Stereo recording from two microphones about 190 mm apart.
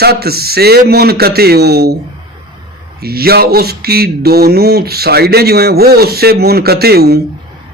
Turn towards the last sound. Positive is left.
turn(degrees=-55)  # may be behind; listen again after turning